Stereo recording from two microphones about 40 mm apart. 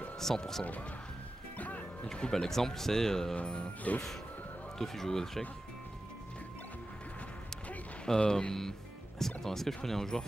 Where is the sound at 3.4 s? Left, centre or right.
Left.